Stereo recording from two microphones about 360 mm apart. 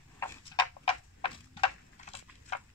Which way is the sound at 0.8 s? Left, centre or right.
Centre.